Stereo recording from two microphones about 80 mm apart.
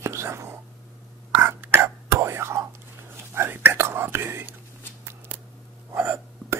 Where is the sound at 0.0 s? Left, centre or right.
Right.